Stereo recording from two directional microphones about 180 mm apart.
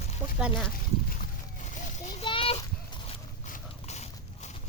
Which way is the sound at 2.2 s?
30° left (ahead or behind).